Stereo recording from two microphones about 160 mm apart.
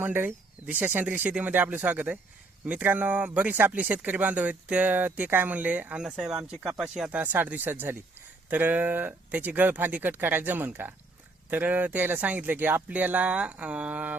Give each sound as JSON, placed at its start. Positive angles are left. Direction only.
{"t": 0.0, "sound": "speech", "side_deg": -10}